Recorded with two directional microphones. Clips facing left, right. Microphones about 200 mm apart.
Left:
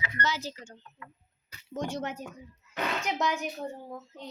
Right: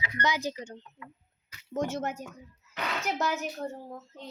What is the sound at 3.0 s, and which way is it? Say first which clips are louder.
Speech: right 3 dB; 5° right (ahead or behind).